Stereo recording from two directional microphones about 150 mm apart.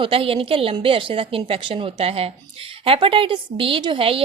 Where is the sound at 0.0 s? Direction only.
35° right (ahead or behind).